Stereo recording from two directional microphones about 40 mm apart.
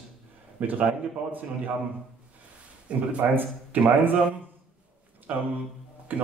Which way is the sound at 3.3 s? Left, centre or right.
Right.